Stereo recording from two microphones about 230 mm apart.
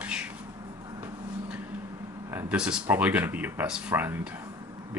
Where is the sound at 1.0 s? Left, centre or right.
Centre.